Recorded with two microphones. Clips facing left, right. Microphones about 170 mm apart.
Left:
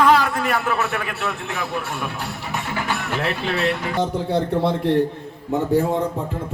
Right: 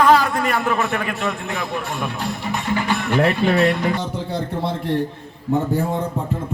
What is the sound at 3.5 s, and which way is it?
Speech, 10° left (ahead or behind).